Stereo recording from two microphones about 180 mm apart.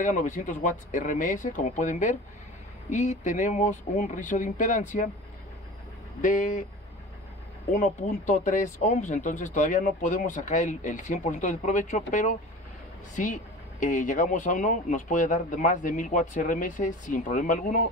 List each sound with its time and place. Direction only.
0.0 s speech: 45° left (ahead or behind)
6.2 s speech: 45° left (ahead or behind)
7.7 s speech: 45° left (ahead or behind)